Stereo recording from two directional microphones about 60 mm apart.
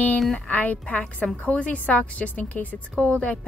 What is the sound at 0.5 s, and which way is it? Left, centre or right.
A woman's voice, left.